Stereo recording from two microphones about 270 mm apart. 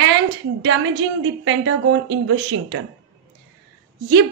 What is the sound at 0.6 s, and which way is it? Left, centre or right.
A woman's voice, right.